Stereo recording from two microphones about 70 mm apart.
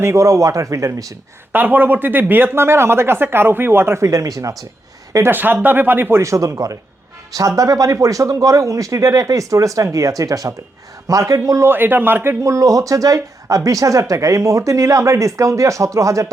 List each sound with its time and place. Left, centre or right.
0.0 s speech: right
1.5 s speech: right
5.3 s a man's voice: right
6.2 s speech: right
11.7 s a man's voice: right
12.4 s speech: right